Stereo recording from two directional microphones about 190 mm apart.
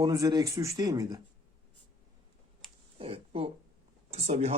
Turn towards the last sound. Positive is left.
turn(degrees=-35)  # may be behind; listen again after turning